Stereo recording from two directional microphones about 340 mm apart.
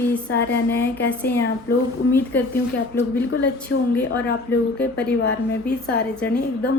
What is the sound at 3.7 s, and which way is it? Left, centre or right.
Speech, left.